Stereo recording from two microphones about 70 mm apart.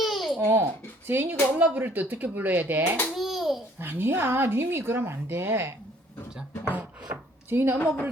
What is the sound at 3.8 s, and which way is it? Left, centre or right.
Speech, right.